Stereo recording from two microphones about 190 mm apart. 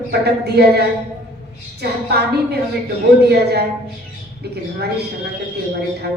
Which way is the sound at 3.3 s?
60° right (ahead or behind).